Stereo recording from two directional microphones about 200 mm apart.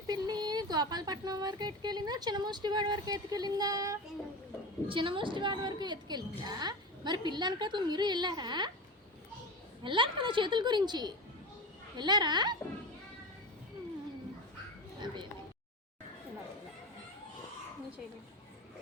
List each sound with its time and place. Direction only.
0.1 s speech: 20° right (ahead or behind)
9.8 s speech: 25° right (ahead or behind)
15.0 s speech: 25° right (ahead or behind)